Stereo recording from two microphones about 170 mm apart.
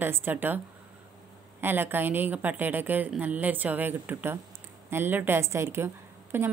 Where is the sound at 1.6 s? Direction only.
10° right (ahead or behind).